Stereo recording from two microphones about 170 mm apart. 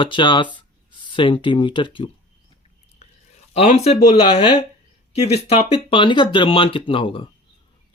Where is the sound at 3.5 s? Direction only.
40° left (ahead or behind).